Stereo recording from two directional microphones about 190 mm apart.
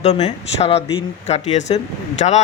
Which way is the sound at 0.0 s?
35° left (ahead or behind).